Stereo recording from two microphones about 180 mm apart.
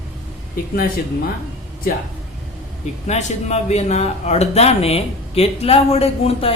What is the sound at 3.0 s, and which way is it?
Speech, 40° left (ahead or behind).